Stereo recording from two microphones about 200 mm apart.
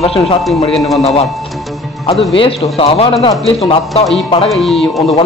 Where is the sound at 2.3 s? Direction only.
30° left (ahead or behind).